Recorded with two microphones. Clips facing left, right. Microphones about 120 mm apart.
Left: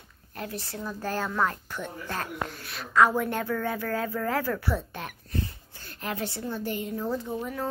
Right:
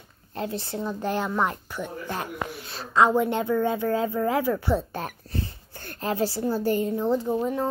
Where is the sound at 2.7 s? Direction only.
25° right (ahead or behind).